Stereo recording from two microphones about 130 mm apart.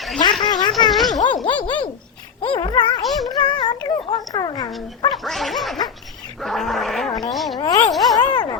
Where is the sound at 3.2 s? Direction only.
35° left (ahead or behind).